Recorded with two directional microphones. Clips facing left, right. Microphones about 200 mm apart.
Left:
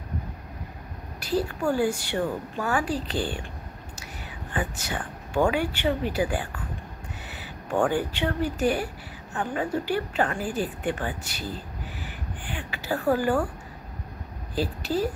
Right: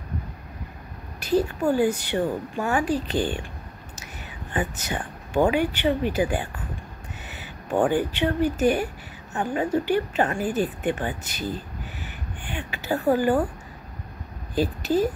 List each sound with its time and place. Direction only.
1.6 s speech: 20° right (ahead or behind)
4.5 s speech: 20° right (ahead or behind)
12.0 s a sound: 20° right (ahead or behind)
14.5 s a woman's voice: 20° right (ahead or behind)